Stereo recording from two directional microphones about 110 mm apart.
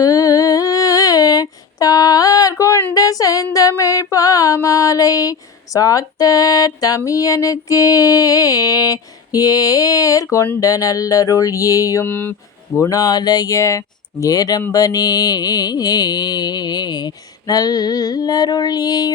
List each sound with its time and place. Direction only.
0.0 s humming: 30° left (ahead or behind)
2.9 s female singing: 35° left (ahead or behind)
12.0 s speech: 20° left (ahead or behind)
12.9 s female singing: 35° left (ahead or behind)